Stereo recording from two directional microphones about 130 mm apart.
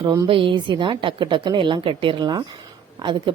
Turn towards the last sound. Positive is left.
turn(degrees=-35)  # may be behind; listen again after turning